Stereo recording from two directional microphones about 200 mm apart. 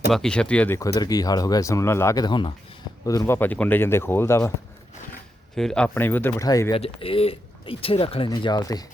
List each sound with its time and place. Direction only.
0.1 s speech: 5° left (ahead or behind)
5.5 s speech: 5° left (ahead or behind)
6.7 s speech: 30° left (ahead or behind)